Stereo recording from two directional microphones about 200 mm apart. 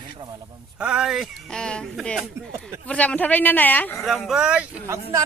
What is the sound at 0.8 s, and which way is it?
A man's voice, 5° right (ahead or behind).